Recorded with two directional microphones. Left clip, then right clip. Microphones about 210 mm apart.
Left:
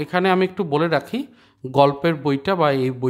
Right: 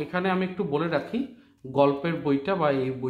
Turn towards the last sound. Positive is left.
turn(degrees=45)  # may be behind; listen again after turning